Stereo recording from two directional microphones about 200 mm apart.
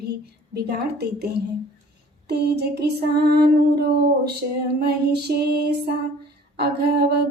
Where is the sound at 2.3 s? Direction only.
55° right (ahead or behind).